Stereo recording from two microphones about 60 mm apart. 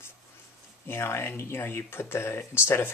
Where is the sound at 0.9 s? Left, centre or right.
Left.